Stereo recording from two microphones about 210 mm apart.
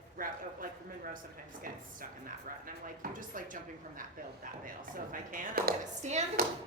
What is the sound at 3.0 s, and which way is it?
Speech, 40° right (ahead or behind).